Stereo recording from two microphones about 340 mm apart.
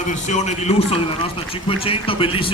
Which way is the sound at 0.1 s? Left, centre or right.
Left.